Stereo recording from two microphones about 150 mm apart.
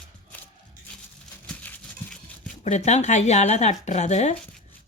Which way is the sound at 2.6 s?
50° left (ahead or behind).